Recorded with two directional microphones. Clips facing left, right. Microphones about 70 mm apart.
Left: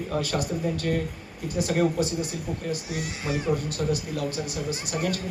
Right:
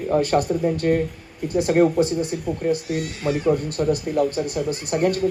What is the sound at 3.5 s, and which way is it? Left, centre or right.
Speech, right.